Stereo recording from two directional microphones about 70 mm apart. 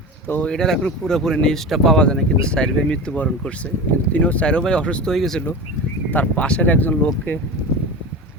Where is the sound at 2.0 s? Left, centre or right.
Centre.